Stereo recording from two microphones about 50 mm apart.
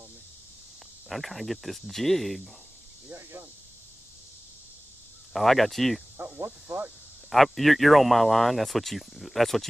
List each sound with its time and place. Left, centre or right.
1.0 s speech: centre
3.2 s speech: right
5.3 s speech: centre
6.4 s speech: right
7.2 s speech: centre